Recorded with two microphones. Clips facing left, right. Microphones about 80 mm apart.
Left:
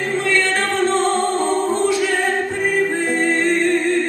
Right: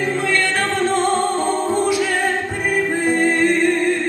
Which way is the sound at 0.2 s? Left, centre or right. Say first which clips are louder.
Left 1 dB; centre.